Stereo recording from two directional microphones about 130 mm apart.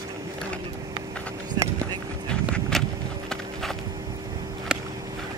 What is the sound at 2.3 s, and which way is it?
Walk, 5° left (ahead or behind).